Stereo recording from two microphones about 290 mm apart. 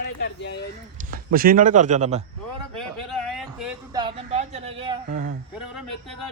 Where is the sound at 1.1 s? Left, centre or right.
Right.